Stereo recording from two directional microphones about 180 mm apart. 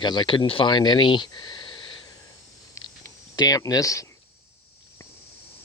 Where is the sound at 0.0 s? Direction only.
25° left (ahead or behind).